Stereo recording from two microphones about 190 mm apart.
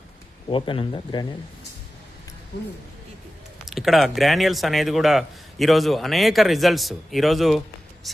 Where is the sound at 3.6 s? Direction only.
Centre (ahead or behind).